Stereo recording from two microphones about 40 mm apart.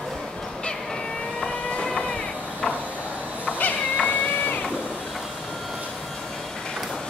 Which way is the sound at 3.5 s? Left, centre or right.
Left.